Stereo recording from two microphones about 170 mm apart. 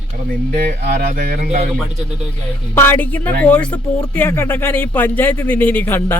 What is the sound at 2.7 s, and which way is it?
Speech, 15° left (ahead or behind).